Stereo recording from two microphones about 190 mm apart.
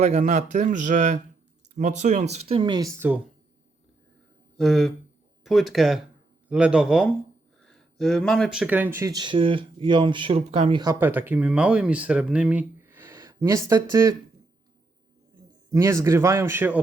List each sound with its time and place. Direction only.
0.0 s speech: 40° right (ahead or behind)
2.3 s speech: 30° right (ahead or behind)
4.5 s speech: centre (ahead or behind); by 10.9 s 25° right (ahead or behind)
11.0 s speech: 10° right (ahead or behind)
15.7 s speech: 15° right (ahead or behind)